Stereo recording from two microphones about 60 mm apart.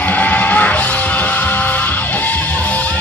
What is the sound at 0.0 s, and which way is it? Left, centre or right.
Music, left.